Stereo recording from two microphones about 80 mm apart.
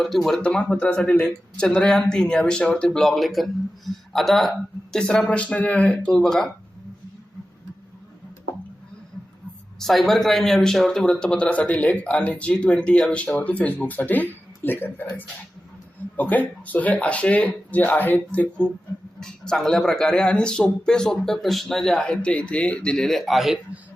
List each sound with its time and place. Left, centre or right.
0.3 s speech: centre
9.7 s speech: centre; by 15.1 s left
16.1 s speech: centre
19.2 s speech: centre